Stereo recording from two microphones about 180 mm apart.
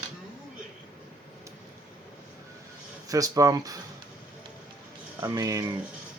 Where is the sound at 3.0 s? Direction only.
20° right (ahead or behind).